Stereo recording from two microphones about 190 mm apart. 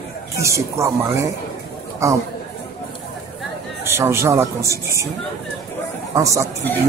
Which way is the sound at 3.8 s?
15° right (ahead or behind).